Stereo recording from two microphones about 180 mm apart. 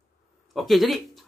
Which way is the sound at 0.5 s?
Centre (ahead or behind).